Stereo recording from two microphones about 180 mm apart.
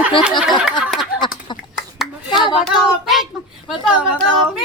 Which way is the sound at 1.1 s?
25° left (ahead or behind).